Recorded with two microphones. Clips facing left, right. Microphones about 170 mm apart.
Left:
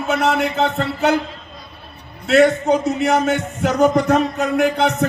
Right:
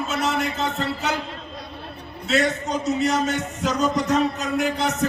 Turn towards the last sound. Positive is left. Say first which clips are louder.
# left 6 dB
turn(degrees=60)  # may be behind; listen again after turning